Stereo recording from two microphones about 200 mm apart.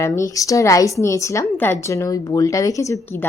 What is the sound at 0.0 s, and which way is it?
A woman's voice, 15° left (ahead or behind).